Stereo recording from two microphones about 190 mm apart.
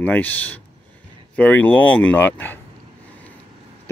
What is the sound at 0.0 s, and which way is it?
Speech, 10° left (ahead or behind).